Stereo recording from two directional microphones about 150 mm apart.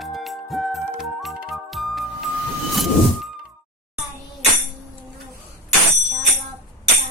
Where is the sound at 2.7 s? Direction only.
Centre (ahead or behind).